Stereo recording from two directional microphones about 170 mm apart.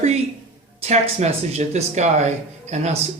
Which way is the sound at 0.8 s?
40° right (ahead or behind).